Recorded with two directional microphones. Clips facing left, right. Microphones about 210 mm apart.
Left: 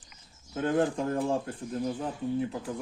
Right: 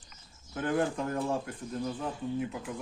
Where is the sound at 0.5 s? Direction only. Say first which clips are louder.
Left 3 dB; 25° left (ahead or behind).